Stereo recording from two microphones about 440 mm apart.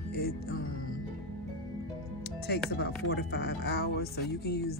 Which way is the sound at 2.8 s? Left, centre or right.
Left.